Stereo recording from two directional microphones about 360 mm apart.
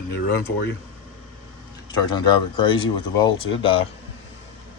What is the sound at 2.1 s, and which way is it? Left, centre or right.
Speech, centre.